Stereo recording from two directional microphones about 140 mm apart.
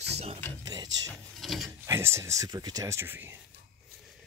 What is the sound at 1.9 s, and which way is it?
Speech, 20° right (ahead or behind).